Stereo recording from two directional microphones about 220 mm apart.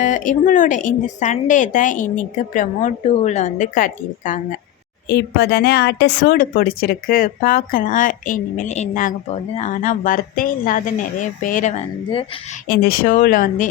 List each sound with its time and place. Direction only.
0.0 s a woman's voice: 35° left (ahead or behind)
5.0 s a woman's voice: 45° left (ahead or behind); by 12.2 s 30° left (ahead or behind)
12.6 s a woman's voice: 45° left (ahead or behind)